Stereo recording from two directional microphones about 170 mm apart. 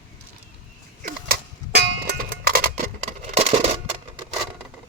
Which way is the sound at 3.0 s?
40° right (ahead or behind).